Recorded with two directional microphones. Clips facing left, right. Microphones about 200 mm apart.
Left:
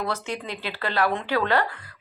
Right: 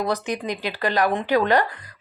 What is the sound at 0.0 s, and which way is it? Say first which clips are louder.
Speech: right 5 dB; 15° right (ahead or behind).